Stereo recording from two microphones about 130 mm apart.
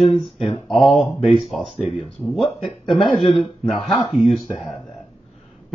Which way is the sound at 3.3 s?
40° left (ahead or behind).